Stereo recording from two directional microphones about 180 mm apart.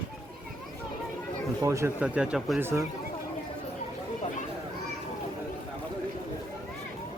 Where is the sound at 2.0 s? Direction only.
5° right (ahead or behind).